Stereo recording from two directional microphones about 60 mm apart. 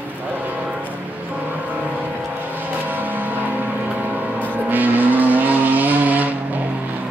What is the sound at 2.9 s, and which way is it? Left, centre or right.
Vehicle, right.